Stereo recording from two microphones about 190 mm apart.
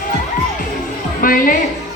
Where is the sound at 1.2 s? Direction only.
50° left (ahead or behind).